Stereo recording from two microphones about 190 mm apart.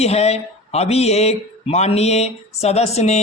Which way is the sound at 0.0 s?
35° left (ahead or behind).